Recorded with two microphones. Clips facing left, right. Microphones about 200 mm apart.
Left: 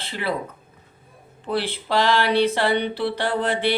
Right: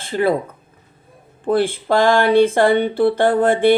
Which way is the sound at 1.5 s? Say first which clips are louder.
Right 8 dB; 50° right (ahead or behind).